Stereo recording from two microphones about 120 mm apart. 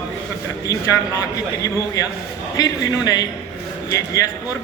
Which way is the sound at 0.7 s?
25° left (ahead or behind).